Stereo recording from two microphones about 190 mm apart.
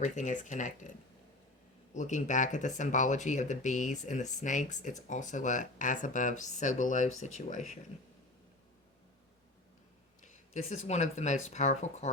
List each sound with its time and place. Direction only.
0.0 s speech: 40° left (ahead or behind)
10.5 s speech: 35° left (ahead or behind)